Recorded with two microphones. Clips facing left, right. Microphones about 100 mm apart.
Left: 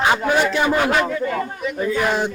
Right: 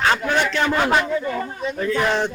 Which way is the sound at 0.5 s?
15° left (ahead or behind).